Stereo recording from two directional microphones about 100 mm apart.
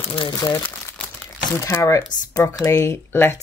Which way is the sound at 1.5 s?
30° left (ahead or behind).